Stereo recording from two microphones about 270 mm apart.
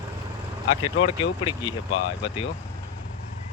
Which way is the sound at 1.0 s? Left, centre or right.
Centre.